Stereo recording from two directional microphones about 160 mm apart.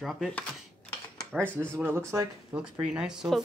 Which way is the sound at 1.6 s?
15° right (ahead or behind).